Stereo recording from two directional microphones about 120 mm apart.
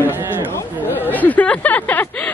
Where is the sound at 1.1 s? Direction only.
15° left (ahead or behind).